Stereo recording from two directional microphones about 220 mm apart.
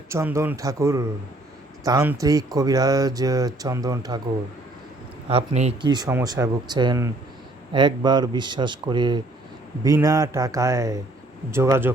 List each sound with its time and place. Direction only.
0.1 s speech: 10° right (ahead or behind)
5.3 s speech: 25° right (ahead or behind); by 11.9 s 10° right (ahead or behind)